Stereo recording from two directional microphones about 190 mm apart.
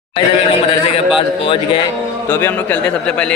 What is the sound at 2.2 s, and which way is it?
A man's voice, 10° left (ahead or behind).